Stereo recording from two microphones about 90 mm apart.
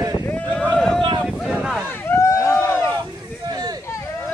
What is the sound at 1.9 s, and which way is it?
Vehicle, 30° left (ahead or behind).